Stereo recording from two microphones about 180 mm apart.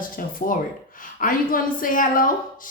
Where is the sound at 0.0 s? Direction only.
50° left (ahead or behind).